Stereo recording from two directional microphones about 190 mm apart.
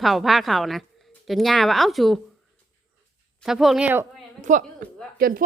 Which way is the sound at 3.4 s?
Centre (ahead or behind).